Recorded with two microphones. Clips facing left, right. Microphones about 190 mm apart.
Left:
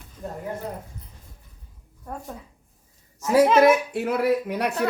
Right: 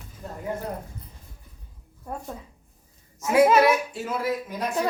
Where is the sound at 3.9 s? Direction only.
65° left (ahead or behind).